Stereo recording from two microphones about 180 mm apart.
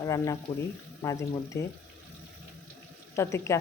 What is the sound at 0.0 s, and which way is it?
Speech, 20° left (ahead or behind).